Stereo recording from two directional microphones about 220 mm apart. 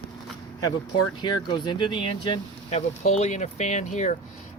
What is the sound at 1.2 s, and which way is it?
Speech, 20° left (ahead or behind).